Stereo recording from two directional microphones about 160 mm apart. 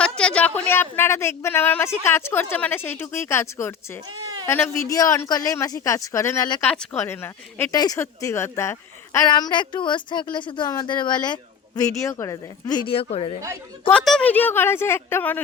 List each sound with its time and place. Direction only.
0.2 s a sound: 5° left (ahead or behind)
0.7 s a woman's voice: 15° left (ahead or behind)
4.2 s a sound: 25° right (ahead or behind)
4.4 s speech: 15° left (ahead or behind)
6.6 s a woman's voice: 10° left (ahead or behind)
9.3 s speech: 30° left (ahead or behind)
13.8 s a woman's voice: 5° left (ahead or behind)